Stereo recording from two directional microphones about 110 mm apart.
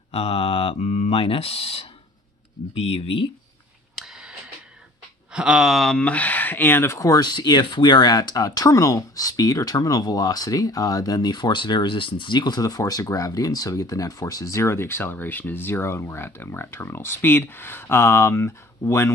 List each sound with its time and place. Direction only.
0.1 s speech: 65° left (ahead or behind)
4.0 s a sound: 5° right (ahead or behind)
5.3 s speech: 5° right (ahead or behind); by 19.1 s 25° left (ahead or behind)